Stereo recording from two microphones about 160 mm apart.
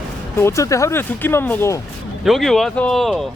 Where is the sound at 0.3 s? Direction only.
15° left (ahead or behind).